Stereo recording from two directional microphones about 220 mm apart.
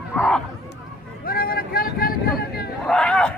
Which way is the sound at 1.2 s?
40° left (ahead or behind).